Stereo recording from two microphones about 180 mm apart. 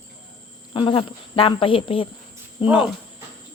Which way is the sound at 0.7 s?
30° left (ahead or behind).